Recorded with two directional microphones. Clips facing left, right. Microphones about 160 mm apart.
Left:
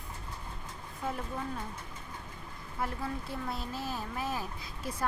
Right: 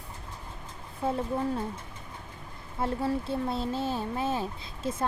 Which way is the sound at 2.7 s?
30° right (ahead or behind).